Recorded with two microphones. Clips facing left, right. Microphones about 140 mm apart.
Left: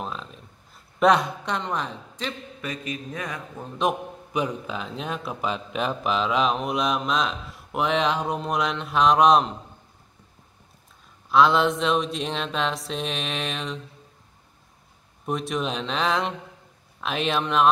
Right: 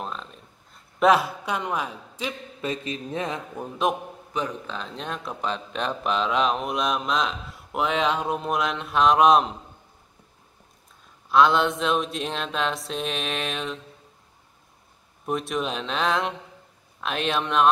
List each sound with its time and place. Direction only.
0.0 s a sound: centre (ahead or behind)
0.9 s a man's voice: centre (ahead or behind)
2.6 s speech: 30° right (ahead or behind)
3.9 s speech: centre (ahead or behind)
4.3 s speech: 10° left (ahead or behind)
11.2 s speech: centre (ahead or behind)
15.2 s speech: centre (ahead or behind)